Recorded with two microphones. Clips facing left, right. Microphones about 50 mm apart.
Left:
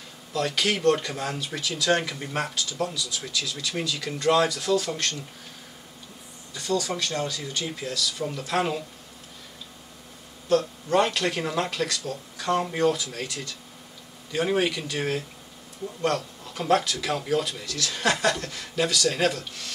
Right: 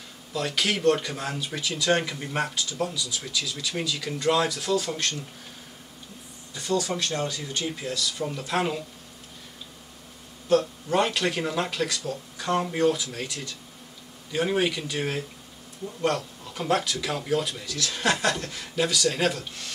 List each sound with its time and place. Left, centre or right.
0.3 s speech: centre
6.5 s speech: right
8.2 s speech: centre
10.6 s speech: centre
12.0 s speech: centre
12.4 s speech: centre
18.2 s speech: centre
18.5 s speech: centre